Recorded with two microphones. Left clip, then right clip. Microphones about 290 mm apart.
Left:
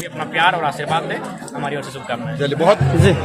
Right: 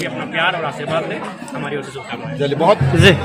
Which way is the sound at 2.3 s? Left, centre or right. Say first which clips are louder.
Right 1 dB; right.